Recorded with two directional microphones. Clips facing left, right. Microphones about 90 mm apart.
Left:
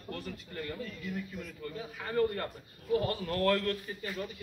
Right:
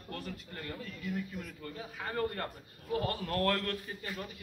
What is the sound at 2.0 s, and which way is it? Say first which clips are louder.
A man's voice: left 4 dB; 40° right (ahead or behind).